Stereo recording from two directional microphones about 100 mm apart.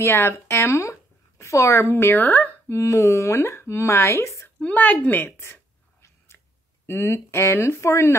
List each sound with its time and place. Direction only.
0.0 s speech: 25° left (ahead or behind)
4.6 s a woman's voice: 15° left (ahead or behind)
6.0 s chewing: 25° left (ahead or behind)
6.9 s speech: 25° left (ahead or behind)